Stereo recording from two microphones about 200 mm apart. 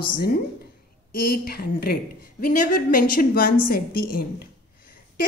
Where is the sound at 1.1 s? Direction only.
50° left (ahead or behind).